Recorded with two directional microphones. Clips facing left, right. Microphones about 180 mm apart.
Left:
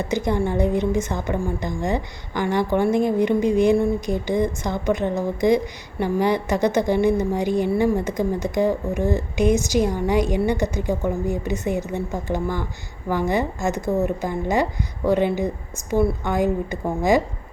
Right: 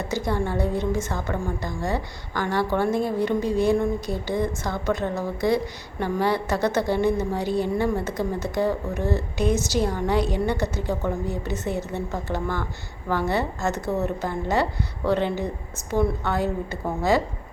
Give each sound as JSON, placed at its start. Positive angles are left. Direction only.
{"t": 0.1, "sound": "a woman's voice", "side_deg": 20}